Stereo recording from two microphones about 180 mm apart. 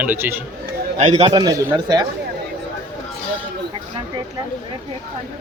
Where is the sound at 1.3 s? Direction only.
20° right (ahead or behind).